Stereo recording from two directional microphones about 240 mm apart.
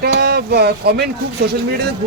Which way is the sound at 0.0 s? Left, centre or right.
Right.